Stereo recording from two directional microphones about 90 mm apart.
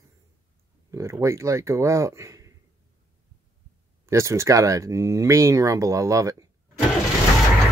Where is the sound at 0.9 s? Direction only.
35° right (ahead or behind).